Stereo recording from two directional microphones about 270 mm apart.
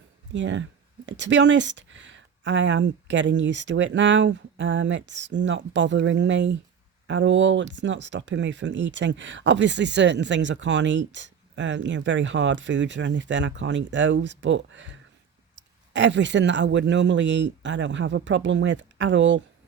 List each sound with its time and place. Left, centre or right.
0.3 s speech: right